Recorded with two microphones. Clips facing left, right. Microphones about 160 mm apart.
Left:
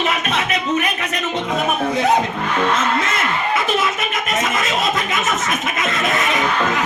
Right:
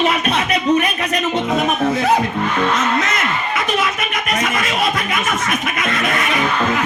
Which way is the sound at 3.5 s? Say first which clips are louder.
Left 1 dB; 25° left (ahead or behind).